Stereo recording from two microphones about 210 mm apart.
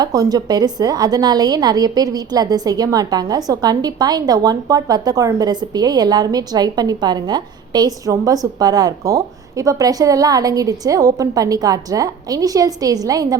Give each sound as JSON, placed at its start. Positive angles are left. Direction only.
{"t": 0.0, "sound": "a woman's voice", "side_deg": -20}